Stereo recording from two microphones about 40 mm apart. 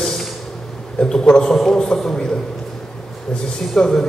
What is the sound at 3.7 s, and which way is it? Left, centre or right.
Speech, centre.